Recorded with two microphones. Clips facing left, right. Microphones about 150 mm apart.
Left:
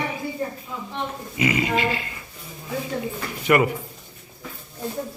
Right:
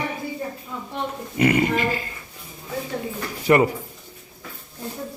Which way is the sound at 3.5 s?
30° right (ahead or behind).